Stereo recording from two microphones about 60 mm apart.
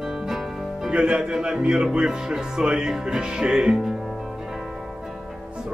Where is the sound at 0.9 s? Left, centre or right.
Centre.